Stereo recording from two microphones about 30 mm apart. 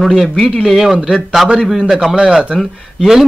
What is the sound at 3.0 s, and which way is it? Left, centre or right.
Speech, centre.